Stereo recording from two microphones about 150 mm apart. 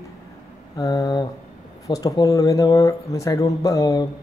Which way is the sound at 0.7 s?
25° left (ahead or behind).